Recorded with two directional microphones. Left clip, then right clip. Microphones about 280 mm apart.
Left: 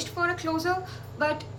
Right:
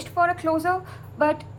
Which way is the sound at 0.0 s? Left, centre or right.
Centre.